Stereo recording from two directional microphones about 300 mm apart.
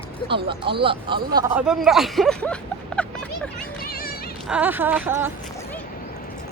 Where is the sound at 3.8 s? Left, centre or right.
Left.